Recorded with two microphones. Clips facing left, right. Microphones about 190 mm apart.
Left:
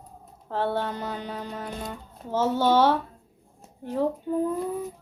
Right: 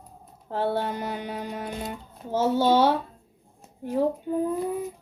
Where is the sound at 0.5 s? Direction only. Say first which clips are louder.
Right 1 dB; 10° right (ahead or behind).